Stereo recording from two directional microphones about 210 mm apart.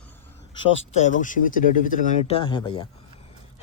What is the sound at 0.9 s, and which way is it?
Speech, 35° left (ahead or behind).